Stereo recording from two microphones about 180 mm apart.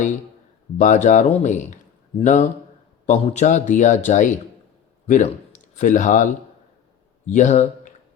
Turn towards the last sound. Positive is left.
turn(degrees=40)  # may be behind; listen again after turning